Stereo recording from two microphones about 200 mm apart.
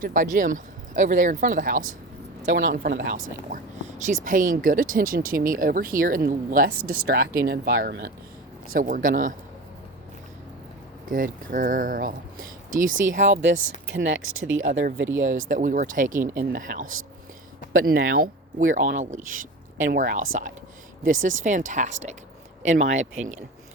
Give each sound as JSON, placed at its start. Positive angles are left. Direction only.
{"t": 0.0, "sound": "speech", "side_deg": -40}
{"t": 2.5, "sound": "speech", "side_deg": -70}
{"t": 2.7, "sound": "speech", "side_deg": -40}
{"t": 6.7, "sound": "speech", "side_deg": -90}
{"t": 7.1, "sound": "speech", "side_deg": -45}
{"t": 11.1, "sound": "speech", "side_deg": -40}
{"t": 13.4, "sound": "speech", "side_deg": -65}
{"t": 15.4, "sound": "speech", "side_deg": -40}
{"t": 16.8, "sound": "speech", "side_deg": -90}
{"t": 18.6, "sound": "speech", "side_deg": -40}